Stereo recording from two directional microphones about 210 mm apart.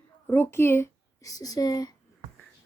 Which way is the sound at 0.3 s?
10° left (ahead or behind).